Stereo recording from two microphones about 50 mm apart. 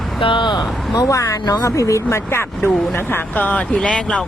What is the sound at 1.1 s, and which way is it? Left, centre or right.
Speech, left.